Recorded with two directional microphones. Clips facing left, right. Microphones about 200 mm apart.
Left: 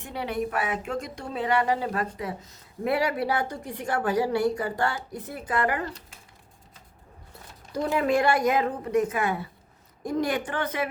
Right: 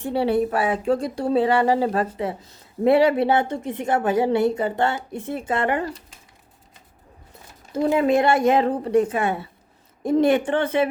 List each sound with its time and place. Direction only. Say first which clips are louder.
0.0 s speech: right 9 dB; 30° right (ahead or behind)
7.7 s speech: right 5 dB; 25° right (ahead or behind)